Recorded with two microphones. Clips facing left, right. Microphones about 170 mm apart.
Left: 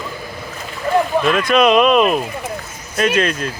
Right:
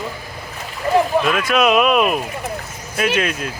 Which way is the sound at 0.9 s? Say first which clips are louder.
Left 1 dB; 5° right (ahead or behind).